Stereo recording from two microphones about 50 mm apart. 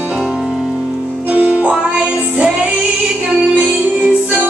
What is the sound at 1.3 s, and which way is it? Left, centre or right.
Music, right.